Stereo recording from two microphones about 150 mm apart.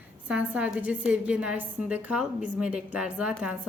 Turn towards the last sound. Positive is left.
turn(degrees=-5)  # may be behind; listen again after turning